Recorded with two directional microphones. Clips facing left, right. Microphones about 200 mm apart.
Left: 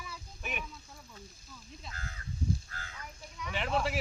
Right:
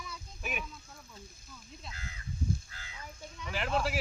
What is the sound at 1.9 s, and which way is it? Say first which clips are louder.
Crow: left 1 dB; 50° left (ahead or behind).